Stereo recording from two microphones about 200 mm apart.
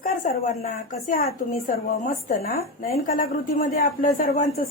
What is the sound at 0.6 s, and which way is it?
A woman's voice, 45° left (ahead or behind).